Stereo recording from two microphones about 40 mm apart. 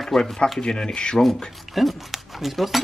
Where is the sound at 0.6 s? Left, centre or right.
Centre.